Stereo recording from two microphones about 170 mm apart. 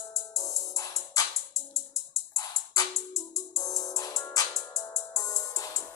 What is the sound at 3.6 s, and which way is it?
Music, 20° left (ahead or behind).